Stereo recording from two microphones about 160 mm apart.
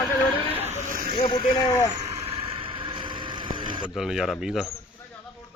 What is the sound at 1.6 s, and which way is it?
Speech, 20° left (ahead or behind).